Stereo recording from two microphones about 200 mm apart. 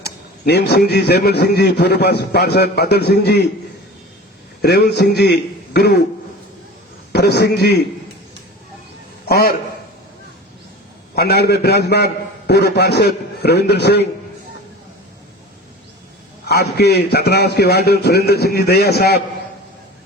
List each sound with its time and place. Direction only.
0.4 s a man's voice: 55° left (ahead or behind)
4.6 s a man's voice: 55° left (ahead or behind)
7.1 s a man's voice: 55° left (ahead or behind)
9.2 s a man's voice: 50° left (ahead or behind)
11.1 s a man's voice: 55° left (ahead or behind)
16.5 s a man's voice: 55° left (ahead or behind)